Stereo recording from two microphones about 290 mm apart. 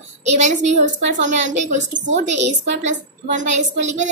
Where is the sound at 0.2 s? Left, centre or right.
Right.